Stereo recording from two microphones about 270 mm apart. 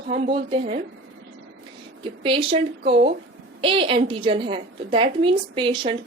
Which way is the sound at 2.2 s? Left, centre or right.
Centre.